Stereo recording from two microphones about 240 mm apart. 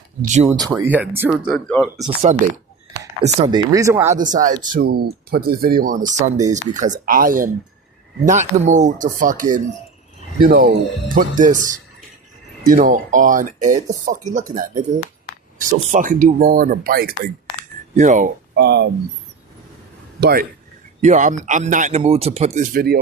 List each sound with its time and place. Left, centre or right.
0.4 s speech: centre
1.5 s speech: centre
2.3 s speech: right
3.7 s speech: centre
4.1 s speech: right
18.5 s speech: right
20.2 s speech: right